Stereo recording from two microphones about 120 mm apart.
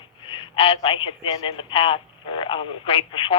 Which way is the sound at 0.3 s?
45° left (ahead or behind).